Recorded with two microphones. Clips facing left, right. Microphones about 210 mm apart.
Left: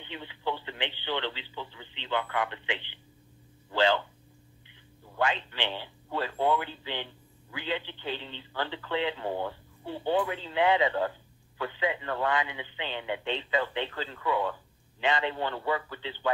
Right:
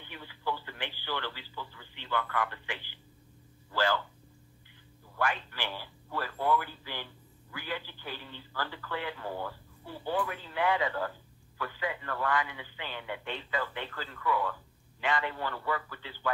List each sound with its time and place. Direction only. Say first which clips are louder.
0.0 s speech: left 4 dB; 20° left (ahead or behind)
5.1 s speech: left 3 dB; 20° left (ahead or behind)